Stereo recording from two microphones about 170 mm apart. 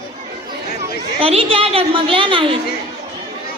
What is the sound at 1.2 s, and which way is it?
Speech, 35° right (ahead or behind).